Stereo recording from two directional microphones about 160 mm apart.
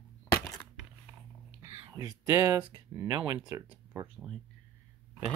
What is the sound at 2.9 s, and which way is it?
Speech, 25° right (ahead or behind).